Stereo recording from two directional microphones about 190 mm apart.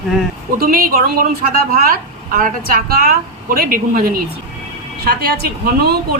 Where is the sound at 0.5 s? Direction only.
50° right (ahead or behind).